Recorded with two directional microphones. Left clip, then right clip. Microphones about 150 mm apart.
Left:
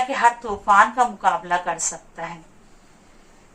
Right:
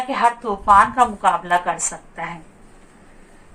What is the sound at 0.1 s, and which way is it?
A woman's voice, 25° right (ahead or behind).